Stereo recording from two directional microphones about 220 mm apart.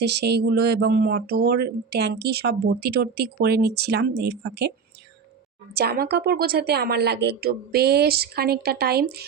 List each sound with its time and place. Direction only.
0.0 s speech: 50° right (ahead or behind)
5.7 s speech: 45° right (ahead or behind)